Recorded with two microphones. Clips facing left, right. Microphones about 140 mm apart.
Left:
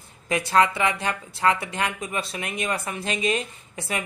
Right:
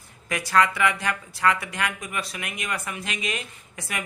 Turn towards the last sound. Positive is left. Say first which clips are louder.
# left 4 dB
turn(degrees=25)  # may be behind; listen again after turning